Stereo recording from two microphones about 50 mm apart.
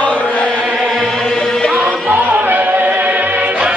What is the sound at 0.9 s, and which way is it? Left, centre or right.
Music, centre.